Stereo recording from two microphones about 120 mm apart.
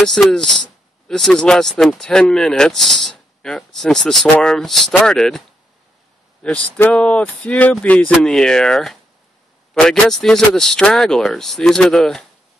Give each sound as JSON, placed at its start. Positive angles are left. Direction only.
{"t": 0.0, "sound": "speech", "side_deg": 5}
{"t": 6.4, "sound": "speech", "side_deg": 10}